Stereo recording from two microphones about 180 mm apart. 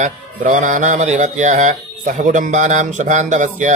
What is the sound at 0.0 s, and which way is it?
Music, 45° right (ahead or behind).